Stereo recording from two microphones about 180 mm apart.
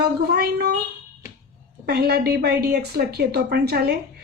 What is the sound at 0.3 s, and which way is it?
Speech, 60° right (ahead or behind).